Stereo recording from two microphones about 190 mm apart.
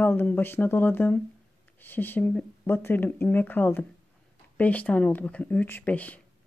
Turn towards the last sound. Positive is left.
turn(degrees=10)  # may be behind; listen again after turning